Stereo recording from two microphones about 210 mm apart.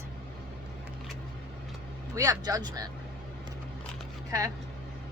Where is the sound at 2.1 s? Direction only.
15° right (ahead or behind).